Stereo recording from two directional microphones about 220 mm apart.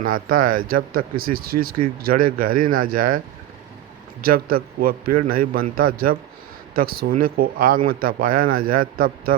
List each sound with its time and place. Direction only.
0.0 s speech: 40° right (ahead or behind)
4.2 s speech: 40° right (ahead or behind)